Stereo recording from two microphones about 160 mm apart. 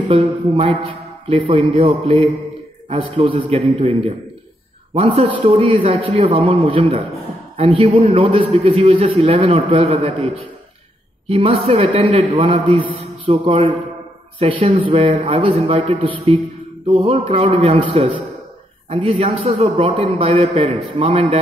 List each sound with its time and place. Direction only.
0.1 s a man's voice: 35° right (ahead or behind)